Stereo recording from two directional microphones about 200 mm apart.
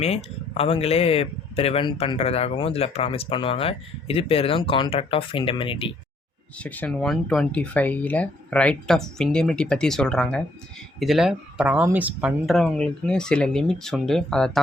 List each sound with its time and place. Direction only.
0.0 s speech: 30° left (ahead or behind)
6.6 s speech: 5° left (ahead or behind)